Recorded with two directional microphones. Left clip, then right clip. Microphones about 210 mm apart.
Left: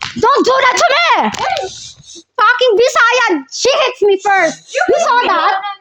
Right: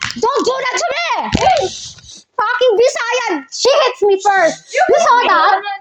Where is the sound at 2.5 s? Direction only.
40° left (ahead or behind).